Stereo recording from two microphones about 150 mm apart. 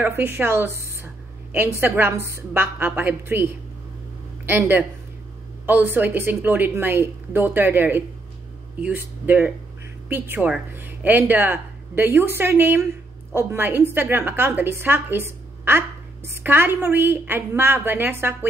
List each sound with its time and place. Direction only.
0.0 s a woman's voice: 15° right (ahead or behind)
4.5 s a woman's voice: 15° right (ahead or behind)